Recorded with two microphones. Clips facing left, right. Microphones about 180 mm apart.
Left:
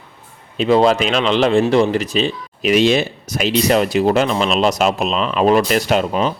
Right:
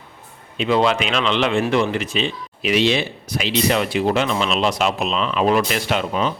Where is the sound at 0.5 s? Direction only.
40° left (ahead or behind).